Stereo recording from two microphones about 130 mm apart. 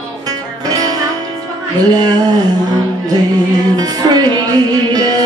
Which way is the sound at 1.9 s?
30° right (ahead or behind).